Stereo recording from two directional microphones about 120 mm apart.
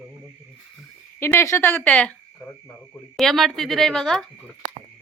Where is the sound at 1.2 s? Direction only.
20° left (ahead or behind).